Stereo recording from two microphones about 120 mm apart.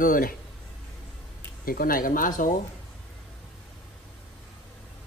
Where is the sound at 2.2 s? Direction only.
90° left.